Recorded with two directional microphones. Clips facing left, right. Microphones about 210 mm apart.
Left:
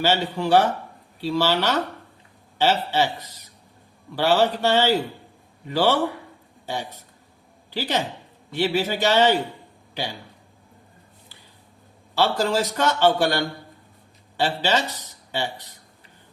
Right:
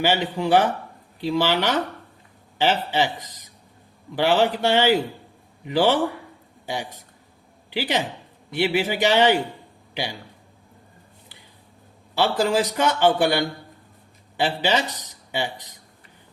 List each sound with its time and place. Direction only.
0.0 s speech: 15° right (ahead or behind)
7.7 s a man's voice: 15° right (ahead or behind)
12.1 s speech: 15° right (ahead or behind)